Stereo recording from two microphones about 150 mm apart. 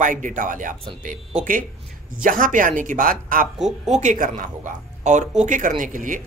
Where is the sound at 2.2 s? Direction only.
65° right (ahead or behind).